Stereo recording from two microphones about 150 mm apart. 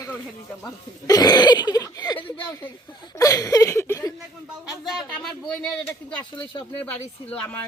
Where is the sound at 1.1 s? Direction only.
25° left (ahead or behind).